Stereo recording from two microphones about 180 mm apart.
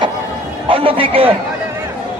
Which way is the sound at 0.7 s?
30° right (ahead or behind).